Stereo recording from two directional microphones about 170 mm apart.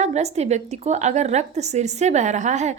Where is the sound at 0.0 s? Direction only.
40° right (ahead or behind).